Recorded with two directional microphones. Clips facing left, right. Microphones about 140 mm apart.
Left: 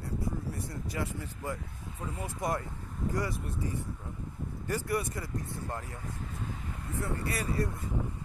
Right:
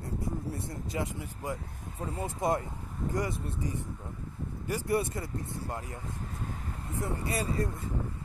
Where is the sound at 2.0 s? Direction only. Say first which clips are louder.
Right 3 dB; 35° right (ahead or behind).